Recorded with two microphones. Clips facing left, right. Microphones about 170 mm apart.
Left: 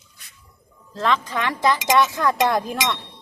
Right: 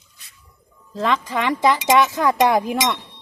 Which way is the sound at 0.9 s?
15° right (ahead or behind).